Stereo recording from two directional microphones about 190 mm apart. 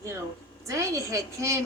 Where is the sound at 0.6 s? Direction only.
15° right (ahead or behind).